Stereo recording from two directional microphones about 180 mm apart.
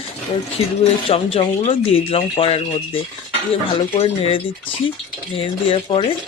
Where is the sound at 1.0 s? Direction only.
30° left (ahead or behind).